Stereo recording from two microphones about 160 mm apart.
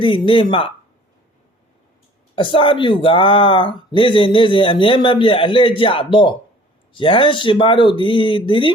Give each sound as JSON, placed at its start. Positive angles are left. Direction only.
{"t": 0.0, "sound": "speech", "side_deg": 30}
{"t": 2.3, "sound": "speech", "side_deg": 35}